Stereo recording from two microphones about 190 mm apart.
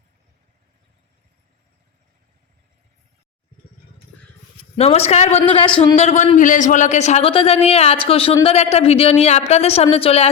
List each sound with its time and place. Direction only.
4.8 s a man's voice: 35° left (ahead or behind)